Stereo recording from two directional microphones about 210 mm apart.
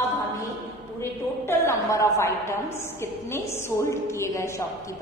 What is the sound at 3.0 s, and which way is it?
A woman's voice, 10° left (ahead or behind).